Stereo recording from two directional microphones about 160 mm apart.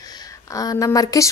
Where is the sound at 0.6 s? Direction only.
20° left (ahead or behind).